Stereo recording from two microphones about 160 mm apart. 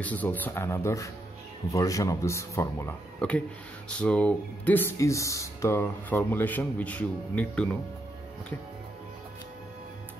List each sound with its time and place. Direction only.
0.0 s speech: 10° left (ahead or behind)